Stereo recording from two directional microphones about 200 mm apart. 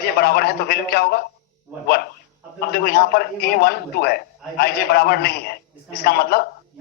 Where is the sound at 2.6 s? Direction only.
50° left (ahead or behind).